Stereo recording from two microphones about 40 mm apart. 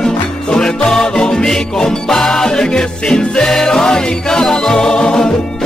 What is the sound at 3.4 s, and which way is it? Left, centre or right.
Music, centre.